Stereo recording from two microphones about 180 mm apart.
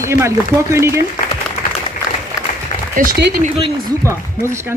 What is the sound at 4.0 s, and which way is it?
Speech, 15° right (ahead or behind).